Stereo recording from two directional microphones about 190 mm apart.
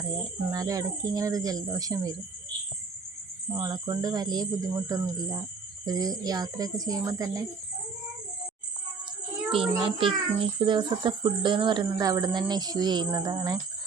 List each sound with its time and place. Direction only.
0.0 s speech: 20° right (ahead or behind)
3.5 s speech: 20° right (ahead or behind)
9.5 s speech: 30° right (ahead or behind)